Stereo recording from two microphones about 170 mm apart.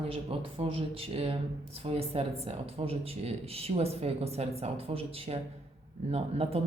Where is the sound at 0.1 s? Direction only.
35° right (ahead or behind).